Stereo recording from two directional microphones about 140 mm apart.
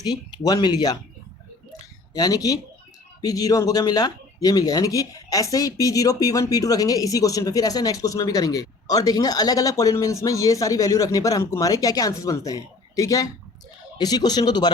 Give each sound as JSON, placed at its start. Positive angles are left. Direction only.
{"t": 0.0, "sound": "speech", "side_deg": 30}
{"t": 2.1, "sound": "speech", "side_deg": 25}